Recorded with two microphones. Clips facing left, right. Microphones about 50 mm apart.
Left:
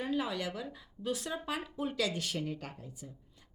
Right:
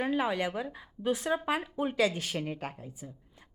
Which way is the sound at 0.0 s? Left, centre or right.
Right.